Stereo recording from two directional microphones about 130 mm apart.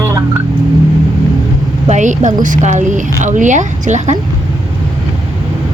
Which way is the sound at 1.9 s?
70° right (ahead or behind).